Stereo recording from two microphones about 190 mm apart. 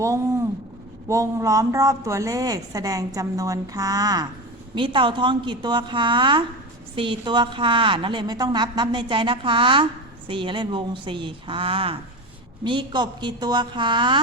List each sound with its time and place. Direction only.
0.0 s a woman's voice: 15° right (ahead or behind)